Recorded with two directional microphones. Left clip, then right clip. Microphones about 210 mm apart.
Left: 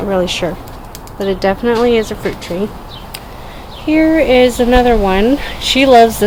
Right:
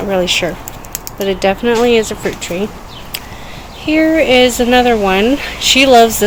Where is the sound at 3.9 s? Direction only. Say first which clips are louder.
Even; 5° right (ahead or behind).